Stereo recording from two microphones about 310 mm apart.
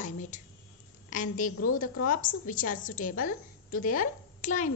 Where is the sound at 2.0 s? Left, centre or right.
Left.